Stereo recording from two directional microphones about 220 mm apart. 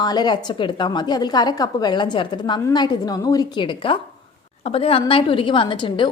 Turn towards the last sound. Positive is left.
turn(degrees=20)  # may be behind; listen again after turning